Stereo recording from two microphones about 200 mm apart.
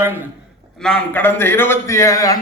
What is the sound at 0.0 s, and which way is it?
Speech, 10° right (ahead or behind).